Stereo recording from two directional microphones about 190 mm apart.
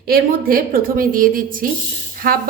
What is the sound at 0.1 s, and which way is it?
A woman's voice, 50° right (ahead or behind).